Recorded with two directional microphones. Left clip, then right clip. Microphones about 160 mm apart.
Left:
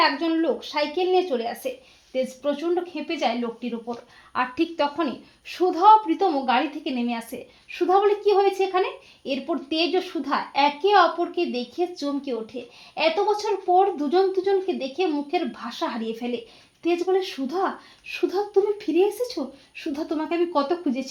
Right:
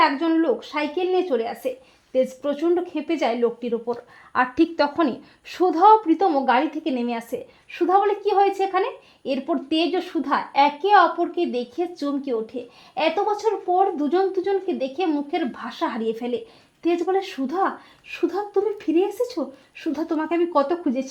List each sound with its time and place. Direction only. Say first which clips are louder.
0.0 s speech: right 2 dB; 35° right (ahead or behind)
2.4 s speech: right 2 dB; 50° right (ahead or behind); by 21.0 s 35° right (ahead or behind)